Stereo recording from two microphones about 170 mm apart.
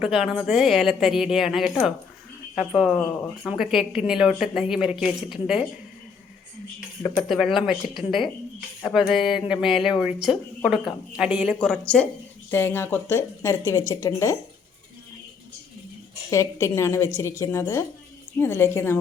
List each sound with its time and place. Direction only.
0.0 s speech: 5° right (ahead or behind)
3.0 s speech: 20° left (ahead or behind)
3.5 s speech: 5° right (ahead or behind)
7.2 s a woman's voice: centre (ahead or behind); by 14.3 s 20° left (ahead or behind)
16.3 s a woman's voice: 15° left (ahead or behind)